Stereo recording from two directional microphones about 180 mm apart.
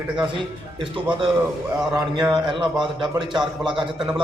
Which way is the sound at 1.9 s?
20° right (ahead or behind).